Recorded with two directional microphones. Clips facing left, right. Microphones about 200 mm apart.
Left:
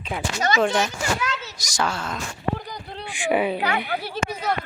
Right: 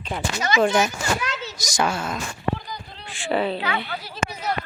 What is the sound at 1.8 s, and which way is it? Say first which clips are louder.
Speech: right 2 dB; 10° right (ahead or behind).